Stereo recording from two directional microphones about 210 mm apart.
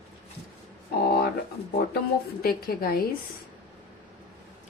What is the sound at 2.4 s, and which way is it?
Speech, 45° left (ahead or behind).